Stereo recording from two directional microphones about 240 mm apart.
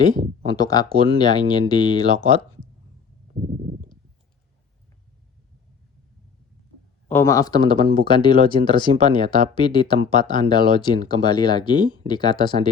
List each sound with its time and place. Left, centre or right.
0.4 s speech: centre
7.1 s speech: centre